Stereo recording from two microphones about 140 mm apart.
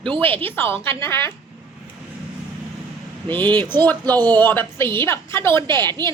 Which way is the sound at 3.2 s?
15° left (ahead or behind).